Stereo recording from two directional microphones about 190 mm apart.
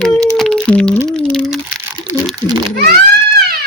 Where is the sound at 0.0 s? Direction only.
5° left (ahead or behind).